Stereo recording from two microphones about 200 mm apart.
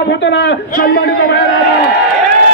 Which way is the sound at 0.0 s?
60° left (ahead or behind).